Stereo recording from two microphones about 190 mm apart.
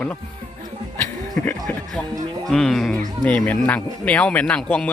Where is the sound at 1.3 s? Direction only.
5° left (ahead or behind).